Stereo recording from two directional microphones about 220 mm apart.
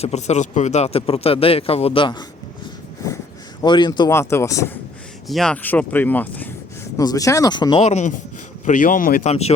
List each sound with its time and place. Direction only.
0.0 s speech: 30° left (ahead or behind)
3.6 s speech: 20° left (ahead or behind)
5.3 s a man's voice: 5° left (ahead or behind); by 9.3 s 40° left (ahead or behind)
9.3 s speech: 30° left (ahead or behind)